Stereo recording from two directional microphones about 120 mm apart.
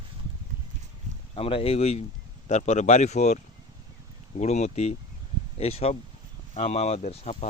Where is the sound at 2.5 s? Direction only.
70° left (ahead or behind).